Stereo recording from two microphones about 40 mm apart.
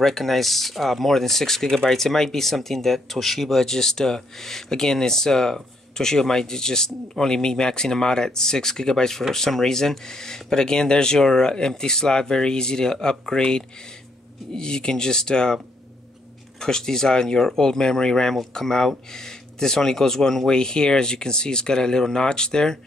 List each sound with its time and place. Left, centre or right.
0.0 s speech: centre
20.5 s speech: centre